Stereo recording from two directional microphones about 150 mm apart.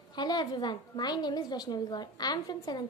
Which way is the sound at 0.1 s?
30° left (ahead or behind).